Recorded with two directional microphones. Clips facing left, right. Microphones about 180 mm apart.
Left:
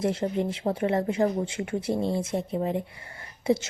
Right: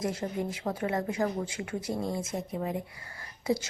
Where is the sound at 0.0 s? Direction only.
30° left (ahead or behind).